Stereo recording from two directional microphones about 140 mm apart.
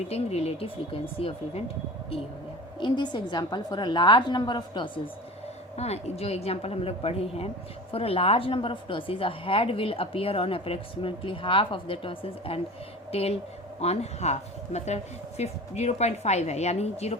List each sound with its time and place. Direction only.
0.1 s speech: 50° left (ahead or behind)
2.8 s a woman's voice: 30° left (ahead or behind)
5.7 s a woman's voice: 50° left (ahead or behind)